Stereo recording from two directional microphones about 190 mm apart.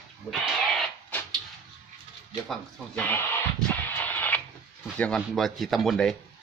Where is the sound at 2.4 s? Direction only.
5° left (ahead or behind).